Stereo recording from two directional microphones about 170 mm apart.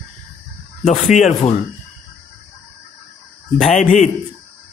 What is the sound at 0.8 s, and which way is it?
Speech, 45° left (ahead or behind).